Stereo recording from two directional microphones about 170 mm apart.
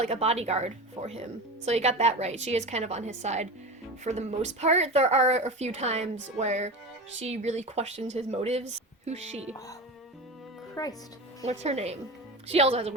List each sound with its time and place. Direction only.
0.0 s speech: 40° right (ahead or behind)
10.8 s speech: 20° left (ahead or behind)
11.6 s speech: 40° right (ahead or behind)